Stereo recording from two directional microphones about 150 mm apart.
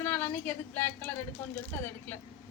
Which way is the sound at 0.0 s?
10° left (ahead or behind).